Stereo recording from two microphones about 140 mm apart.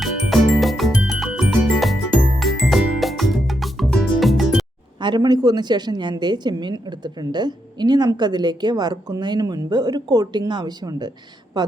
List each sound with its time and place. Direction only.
0.0 s music: centre (ahead or behind)
4.9 s a woman's voice: 35° right (ahead or behind)